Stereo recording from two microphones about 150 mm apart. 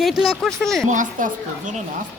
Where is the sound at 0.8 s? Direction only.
60° right (ahead or behind).